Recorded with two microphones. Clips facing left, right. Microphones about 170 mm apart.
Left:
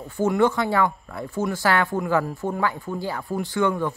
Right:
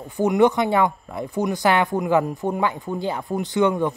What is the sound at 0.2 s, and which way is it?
Speech, 20° right (ahead or behind).